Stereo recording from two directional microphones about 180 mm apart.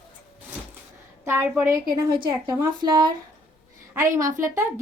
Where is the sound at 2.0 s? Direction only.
25° right (ahead or behind).